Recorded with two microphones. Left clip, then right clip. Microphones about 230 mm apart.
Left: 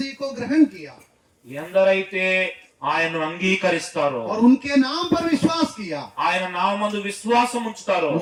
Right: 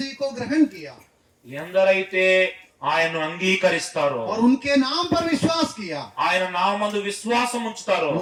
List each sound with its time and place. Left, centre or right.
0.2 s speech: right
1.5 s speech: right